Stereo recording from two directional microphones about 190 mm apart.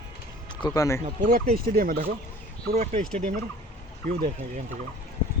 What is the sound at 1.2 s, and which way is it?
Speech, 45° right (ahead or behind).